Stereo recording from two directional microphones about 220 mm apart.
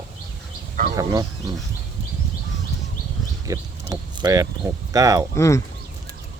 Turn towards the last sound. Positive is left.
turn(degrees=15)  # may be behind; listen again after turning